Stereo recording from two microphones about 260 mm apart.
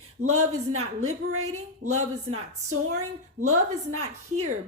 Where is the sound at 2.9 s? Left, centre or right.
Right.